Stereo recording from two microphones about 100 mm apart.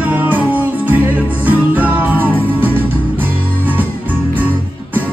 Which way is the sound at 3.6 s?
20° right (ahead or behind).